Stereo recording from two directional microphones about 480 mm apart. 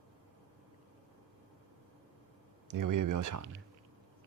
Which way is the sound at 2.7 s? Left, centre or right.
Right.